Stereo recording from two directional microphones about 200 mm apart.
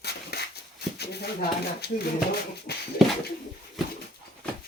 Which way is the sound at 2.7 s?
55° left (ahead or behind).